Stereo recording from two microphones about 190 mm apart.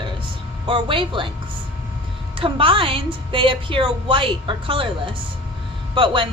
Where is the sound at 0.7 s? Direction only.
25° right (ahead or behind).